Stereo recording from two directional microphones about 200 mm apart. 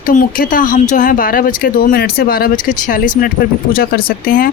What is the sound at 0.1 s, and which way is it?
Speech, 45° left (ahead or behind).